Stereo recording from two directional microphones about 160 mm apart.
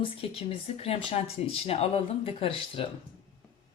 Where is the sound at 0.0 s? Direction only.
35° left (ahead or behind).